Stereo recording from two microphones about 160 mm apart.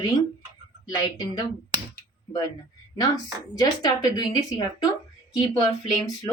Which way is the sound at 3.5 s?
25° left (ahead or behind).